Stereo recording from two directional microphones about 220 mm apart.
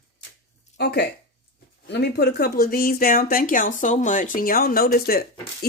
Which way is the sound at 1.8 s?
50° left (ahead or behind).